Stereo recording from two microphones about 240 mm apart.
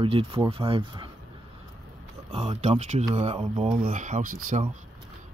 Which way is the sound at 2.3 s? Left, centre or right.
Right.